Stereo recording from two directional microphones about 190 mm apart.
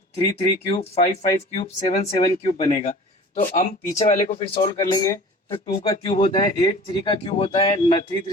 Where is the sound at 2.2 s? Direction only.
20° left (ahead or behind).